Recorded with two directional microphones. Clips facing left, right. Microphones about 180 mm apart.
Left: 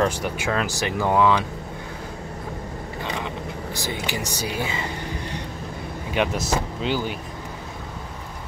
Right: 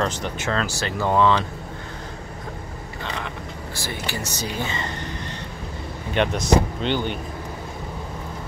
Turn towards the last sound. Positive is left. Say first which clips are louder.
# right 1 dB
turn(degrees=5)  # may be behind; listen again after turning